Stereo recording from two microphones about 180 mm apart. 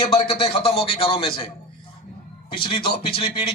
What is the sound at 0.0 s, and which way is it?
A man's voice, 35° left (ahead or behind).